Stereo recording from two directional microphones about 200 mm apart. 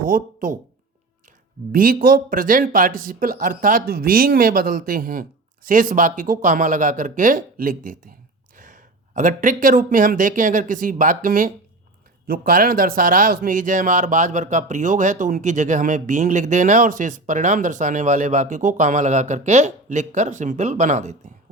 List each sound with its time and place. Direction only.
0.0 s speech: 40° right (ahead or behind)
1.7 s a man's voice: 45° right (ahead or behind)